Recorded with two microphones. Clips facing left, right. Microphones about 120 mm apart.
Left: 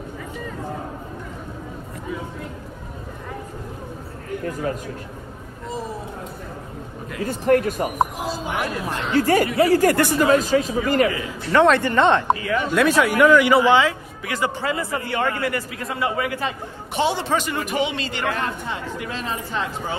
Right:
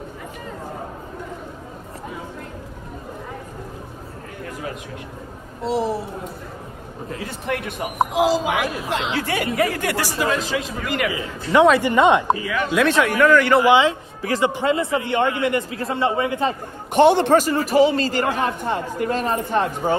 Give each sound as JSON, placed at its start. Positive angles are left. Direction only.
{"t": 5.6, "sound": "speech", "side_deg": -80}
{"t": 7.2, "sound": "speech", "side_deg": 40}
{"t": 8.1, "sound": "speech", "side_deg": -90}
{"t": 9.1, "sound": "speech", "side_deg": 40}
{"t": 11.1, "sound": "speech", "side_deg": -15}
{"t": 12.3, "sound": "speech", "side_deg": 0}
{"t": 13.7, "sound": "a man's voice", "side_deg": -20}
{"t": 14.2, "sound": "a man's voice", "side_deg": -35}
{"t": 14.5, "sound": "a man's voice", "side_deg": -25}
{"t": 16.9, "sound": "a man's voice", "side_deg": -55}
{"t": 18.4, "sound": "speech", "side_deg": -55}